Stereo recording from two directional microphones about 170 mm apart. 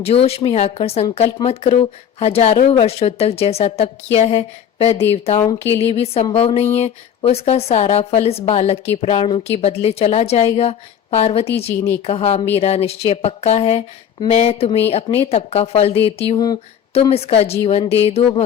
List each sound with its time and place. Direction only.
0.0 s a woman's voice: 35° left (ahead or behind)